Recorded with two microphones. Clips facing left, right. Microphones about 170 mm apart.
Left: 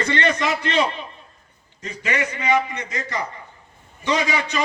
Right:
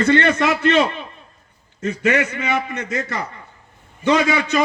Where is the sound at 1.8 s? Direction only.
60° right (ahead or behind).